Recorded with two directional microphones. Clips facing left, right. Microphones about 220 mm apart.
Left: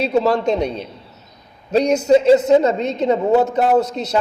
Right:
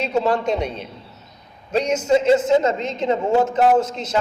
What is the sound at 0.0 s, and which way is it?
A woman's voice, 40° left (ahead or behind).